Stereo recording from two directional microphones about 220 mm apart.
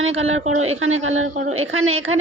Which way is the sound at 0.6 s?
70° right (ahead or behind).